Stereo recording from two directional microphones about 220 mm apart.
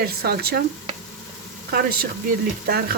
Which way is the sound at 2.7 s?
45° right (ahead or behind).